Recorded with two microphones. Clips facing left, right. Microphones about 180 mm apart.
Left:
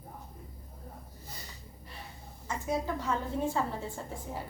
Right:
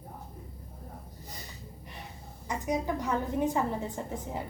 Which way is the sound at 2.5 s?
15° right (ahead or behind).